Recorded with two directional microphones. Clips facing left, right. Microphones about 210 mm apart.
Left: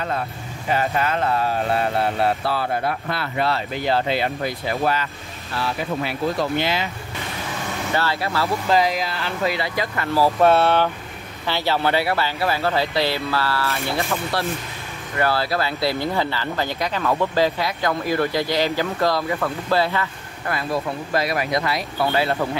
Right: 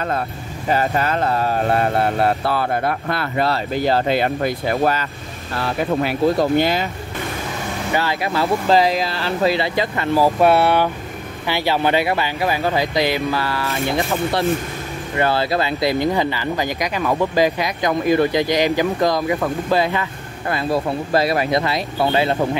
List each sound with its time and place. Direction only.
0.7 s speech: 40° right (ahead or behind)
7.9 s speech: 15° right (ahead or behind)
8.6 s speech: 30° right (ahead or behind)